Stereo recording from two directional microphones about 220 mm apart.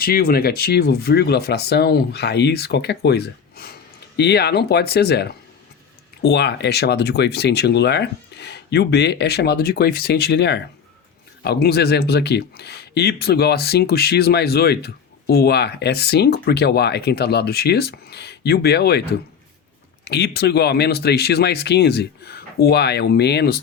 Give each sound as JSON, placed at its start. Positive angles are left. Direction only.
{"t": 0.0, "sound": "speech", "side_deg": 45}